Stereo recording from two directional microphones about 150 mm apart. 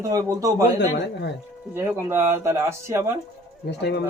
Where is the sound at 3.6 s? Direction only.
90° left.